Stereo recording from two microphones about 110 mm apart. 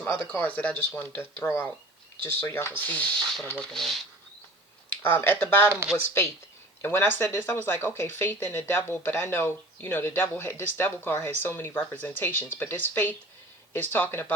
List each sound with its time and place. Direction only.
0.0 s speech: 15° left (ahead or behind)
5.0 s speech: 20° left (ahead or behind)
6.8 s speech: 20° left (ahead or behind)